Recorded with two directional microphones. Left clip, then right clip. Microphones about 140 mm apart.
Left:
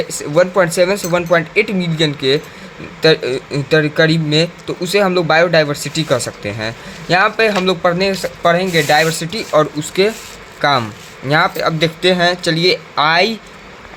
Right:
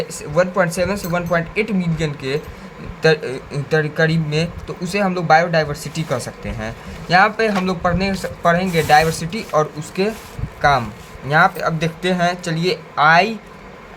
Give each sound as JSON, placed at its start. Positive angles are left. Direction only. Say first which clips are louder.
{"t": 0.1, "sound": "speech", "louder": "left 5 dB", "side_deg": 65}
{"t": 7.2, "sound": "speech", "louder": "left 1 dB", "side_deg": 50}